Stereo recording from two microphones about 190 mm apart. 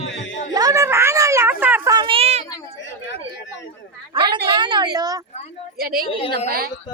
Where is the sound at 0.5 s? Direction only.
15° right (ahead or behind).